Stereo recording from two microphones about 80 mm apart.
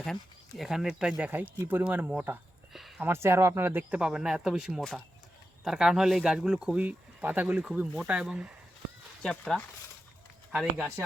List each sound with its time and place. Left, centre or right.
0.0 s speech: centre
3.0 s speech: right; by 6.8 s centre
6.8 s speech: right
9.2 s speech: centre
10.5 s speech: centre